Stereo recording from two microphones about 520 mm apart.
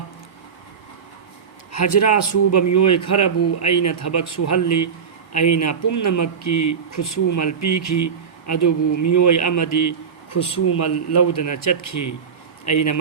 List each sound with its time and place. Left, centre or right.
1.7 s speech: left